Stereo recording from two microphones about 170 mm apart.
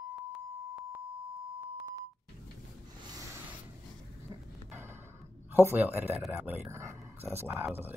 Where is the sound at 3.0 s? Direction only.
20° right (ahead or behind).